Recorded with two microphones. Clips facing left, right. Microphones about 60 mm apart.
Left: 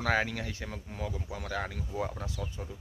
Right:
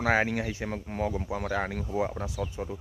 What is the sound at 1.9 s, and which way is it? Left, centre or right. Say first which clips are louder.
Speech: right 6 dB; centre.